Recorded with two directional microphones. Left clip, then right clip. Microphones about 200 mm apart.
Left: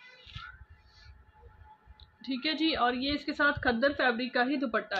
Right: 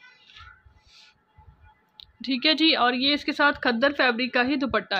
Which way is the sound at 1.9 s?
55° right (ahead or behind).